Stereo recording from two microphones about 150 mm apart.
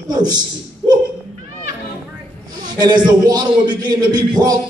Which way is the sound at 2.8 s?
25° right (ahead or behind).